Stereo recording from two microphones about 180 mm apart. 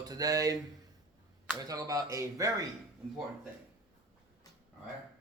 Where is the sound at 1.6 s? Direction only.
20° right (ahead or behind).